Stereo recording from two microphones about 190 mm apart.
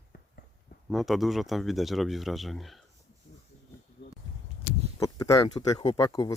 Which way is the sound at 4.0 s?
65° left (ahead or behind).